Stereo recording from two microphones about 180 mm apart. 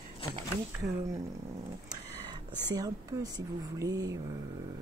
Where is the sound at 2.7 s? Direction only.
20° right (ahead or behind).